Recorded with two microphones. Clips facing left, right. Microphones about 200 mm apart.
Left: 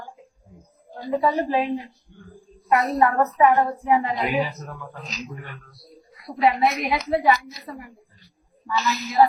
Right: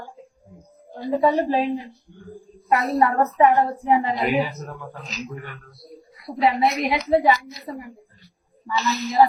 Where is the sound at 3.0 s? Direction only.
30° right (ahead or behind).